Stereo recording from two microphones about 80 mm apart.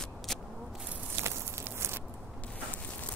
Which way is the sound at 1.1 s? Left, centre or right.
Right.